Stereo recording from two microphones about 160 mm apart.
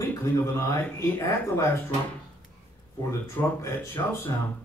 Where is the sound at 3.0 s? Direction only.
20° left (ahead or behind).